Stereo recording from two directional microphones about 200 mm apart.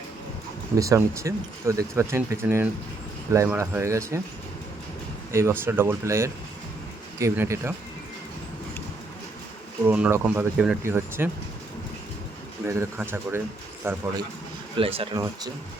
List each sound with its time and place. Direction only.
0.8 s speech: 15° right (ahead or behind)
5.3 s speech: 15° right (ahead or behind)
9.8 s speech: 10° right (ahead or behind)
12.6 s a man's voice: 15° right (ahead or behind)